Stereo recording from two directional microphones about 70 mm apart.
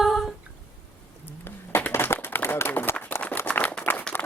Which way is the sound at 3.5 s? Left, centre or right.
Left.